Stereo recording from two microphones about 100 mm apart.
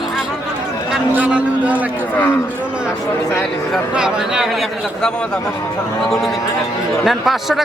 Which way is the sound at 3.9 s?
5° right (ahead or behind).